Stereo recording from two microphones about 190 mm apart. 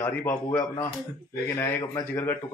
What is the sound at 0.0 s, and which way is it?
Speech, 10° left (ahead or behind).